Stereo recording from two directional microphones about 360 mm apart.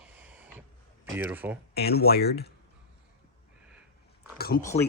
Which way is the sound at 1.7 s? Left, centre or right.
Left.